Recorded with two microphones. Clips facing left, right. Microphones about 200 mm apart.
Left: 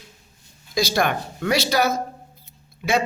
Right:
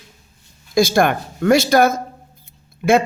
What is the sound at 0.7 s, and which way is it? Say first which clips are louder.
A man's voice: right 6 dB; 50° right (ahead or behind).